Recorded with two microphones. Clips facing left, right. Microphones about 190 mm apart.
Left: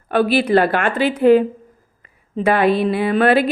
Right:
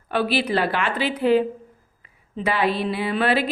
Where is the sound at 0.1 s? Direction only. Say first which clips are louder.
Left 7 dB; 50° left (ahead or behind).